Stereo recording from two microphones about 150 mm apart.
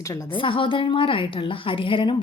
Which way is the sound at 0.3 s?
35° left (ahead or behind).